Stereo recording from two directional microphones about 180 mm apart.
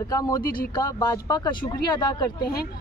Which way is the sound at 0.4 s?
55° left (ahead or behind).